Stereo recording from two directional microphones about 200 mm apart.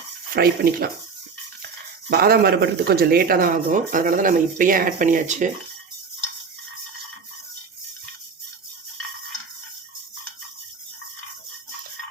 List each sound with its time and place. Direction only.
0.3 s speech: 50° right (ahead or behind)
2.0 s speech: 50° right (ahead or behind)